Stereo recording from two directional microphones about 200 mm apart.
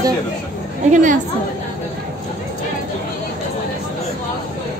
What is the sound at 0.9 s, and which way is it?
Speech, 40° right (ahead or behind).